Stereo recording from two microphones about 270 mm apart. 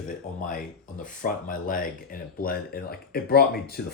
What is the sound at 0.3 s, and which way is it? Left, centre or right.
Speech, left.